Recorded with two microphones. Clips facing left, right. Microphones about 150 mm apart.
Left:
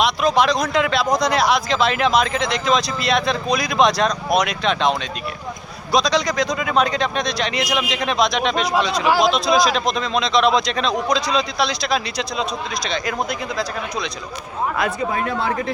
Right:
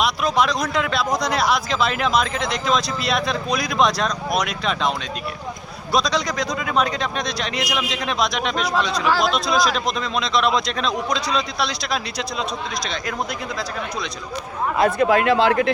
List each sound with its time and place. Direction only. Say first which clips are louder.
0.0 s a sound: left 3 dB; 5° right (ahead or behind)
0.7 s speech: left 3 dB; centre (ahead or behind)
5.9 s speech: left 3 dB; 5° right (ahead or behind)
8.7 s speech: left 2 dB; 10° left (ahead or behind)
9.3 s speech: left 3 dB; 5° right (ahead or behind)
14.8 s speech: right 6 dB; 65° right (ahead or behind)